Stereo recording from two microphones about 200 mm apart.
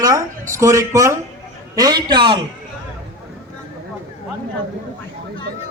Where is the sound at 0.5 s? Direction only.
15° right (ahead or behind).